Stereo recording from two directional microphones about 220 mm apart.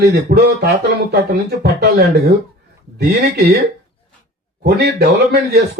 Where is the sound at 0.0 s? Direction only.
45° right (ahead or behind).